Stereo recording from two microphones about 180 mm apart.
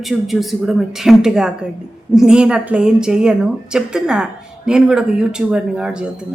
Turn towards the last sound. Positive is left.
turn(degrees=-5)  # may be behind; listen again after turning